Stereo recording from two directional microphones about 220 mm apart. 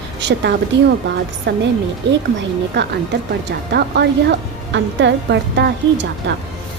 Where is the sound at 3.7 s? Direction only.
50° right (ahead or behind).